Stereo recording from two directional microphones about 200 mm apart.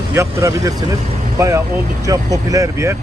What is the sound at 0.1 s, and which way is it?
Speech, 15° right (ahead or behind).